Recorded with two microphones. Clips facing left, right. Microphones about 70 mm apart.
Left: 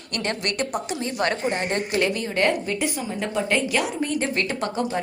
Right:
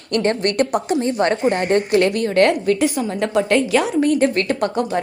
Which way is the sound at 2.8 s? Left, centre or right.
Right.